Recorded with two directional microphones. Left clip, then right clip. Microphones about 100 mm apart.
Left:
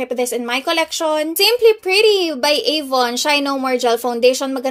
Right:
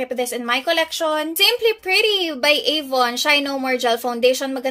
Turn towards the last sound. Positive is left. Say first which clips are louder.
# left 3 dB
turn(degrees=30)  # may be behind; listen again after turning